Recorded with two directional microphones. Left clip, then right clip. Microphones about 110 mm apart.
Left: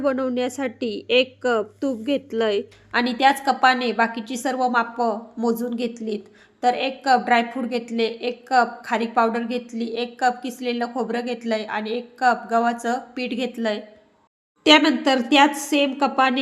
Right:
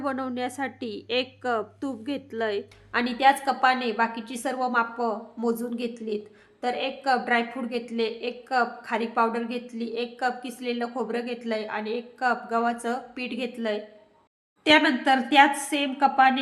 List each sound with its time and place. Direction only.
0.0 s a woman's voice: 15° left (ahead or behind)
14.6 s a woman's voice: 45° left (ahead or behind)